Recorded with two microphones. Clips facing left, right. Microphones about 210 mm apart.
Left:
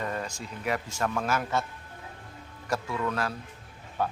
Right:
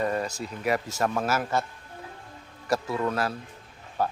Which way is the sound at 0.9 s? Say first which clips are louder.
Right 3 dB; 40° right (ahead or behind).